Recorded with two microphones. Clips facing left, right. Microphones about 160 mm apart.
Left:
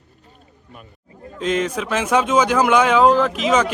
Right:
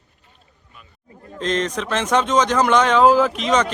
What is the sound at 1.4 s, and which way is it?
Speech, 10° left (ahead or behind).